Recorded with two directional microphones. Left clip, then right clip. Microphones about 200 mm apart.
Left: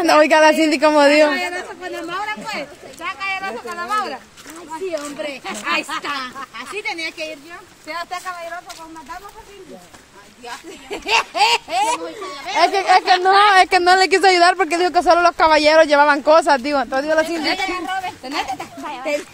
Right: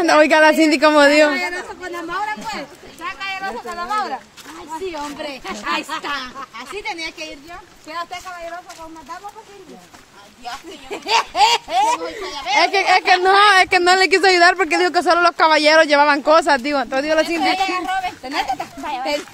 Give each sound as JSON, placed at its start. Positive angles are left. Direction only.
{"t": 0.0, "sound": "a man's voice", "side_deg": -5}
{"t": 1.3, "sound": "a sound", "side_deg": 10}
{"t": 4.9, "sound": "a man's voice", "side_deg": -15}
{"t": 6.0, "sound": "speech", "side_deg": 0}
{"t": 7.9, "sound": "speech", "side_deg": 35}
{"t": 10.9, "sound": "speech", "side_deg": 0}
{"t": 12.0, "sound": "a child's voice", "side_deg": -35}
{"t": 12.5, "sound": "a man's voice", "side_deg": 0}
{"t": 13.7, "sound": "speech", "side_deg": 0}
{"t": 17.6, "sound": "speech", "side_deg": -60}
{"t": 18.2, "sound": "speech", "side_deg": -5}